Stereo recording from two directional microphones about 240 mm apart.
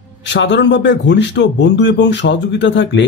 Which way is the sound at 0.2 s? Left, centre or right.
Left.